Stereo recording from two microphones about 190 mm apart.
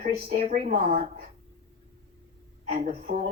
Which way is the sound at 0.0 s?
45° right (ahead or behind).